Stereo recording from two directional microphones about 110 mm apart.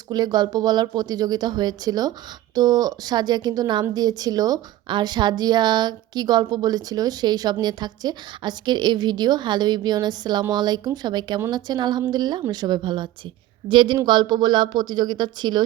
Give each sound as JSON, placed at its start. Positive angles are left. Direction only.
{"t": 0.1, "sound": "a woman's voice", "side_deg": -40}